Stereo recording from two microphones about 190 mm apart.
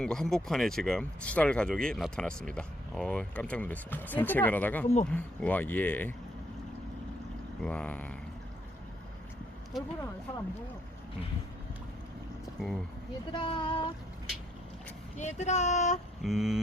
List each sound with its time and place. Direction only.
0.0 s speech: centre (ahead or behind)
7.6 s speech: 5° left (ahead or behind)
12.5 s speech: centre (ahead or behind)
13.3 s speech: 25° left (ahead or behind)
15.2 s speech: 35° left (ahead or behind)
16.2 s speech: centre (ahead or behind)